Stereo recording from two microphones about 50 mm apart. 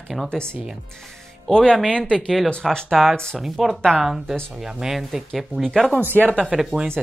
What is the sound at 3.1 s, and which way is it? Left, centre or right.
Speech, centre.